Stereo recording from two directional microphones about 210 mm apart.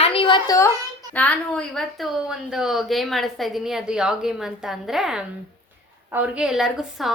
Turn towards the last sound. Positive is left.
turn(degrees=0)  # may be behind; listen again after turning